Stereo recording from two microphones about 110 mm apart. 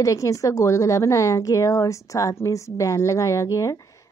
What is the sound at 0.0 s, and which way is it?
A woman's voice, 30° left (ahead or behind).